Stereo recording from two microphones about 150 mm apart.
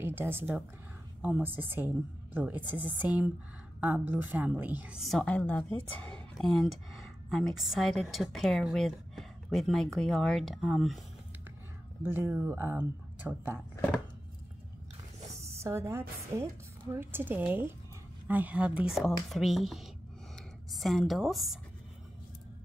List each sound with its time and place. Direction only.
0.0 s a woman's voice: 15° right (ahead or behind)
12.0 s a woman's voice: 15° right (ahead or behind)
15.4 s a woman's voice: 20° right (ahead or behind); by 21.5 s centre (ahead or behind)